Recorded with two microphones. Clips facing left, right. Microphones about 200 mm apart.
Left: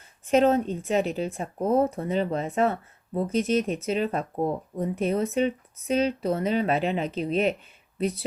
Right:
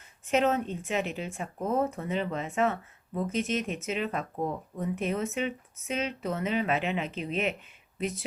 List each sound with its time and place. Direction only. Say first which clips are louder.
0.3 s speech: left 6 dB; 35° left (ahead or behind)